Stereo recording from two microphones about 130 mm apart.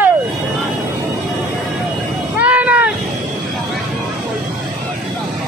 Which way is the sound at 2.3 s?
10° right (ahead or behind).